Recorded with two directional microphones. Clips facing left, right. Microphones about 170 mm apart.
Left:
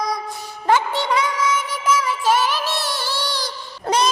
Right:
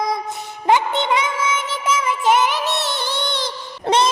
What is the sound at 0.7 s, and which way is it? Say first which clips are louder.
Child singing: right 1 dB; 20° right (ahead or behind).